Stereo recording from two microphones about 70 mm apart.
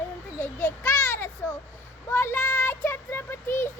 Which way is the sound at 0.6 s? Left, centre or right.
Left.